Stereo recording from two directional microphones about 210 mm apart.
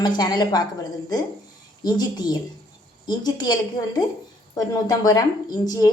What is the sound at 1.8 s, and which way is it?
A woman's voice, 20° left (ahead or behind).